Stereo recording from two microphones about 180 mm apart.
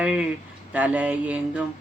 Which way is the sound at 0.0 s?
5° right (ahead or behind).